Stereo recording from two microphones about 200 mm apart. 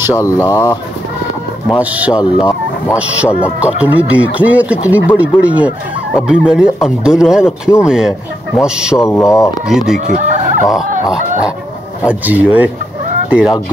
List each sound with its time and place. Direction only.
0.1 s speech: 15° left (ahead or behind)
1.7 s speech: 5° right (ahead or behind)
9.0 s speech: 15° left (ahead or behind)
9.7 s speech: 5° right (ahead or behind)
9.9 s speech: 35° right (ahead or behind)
12.0 s speech: 5° right (ahead or behind)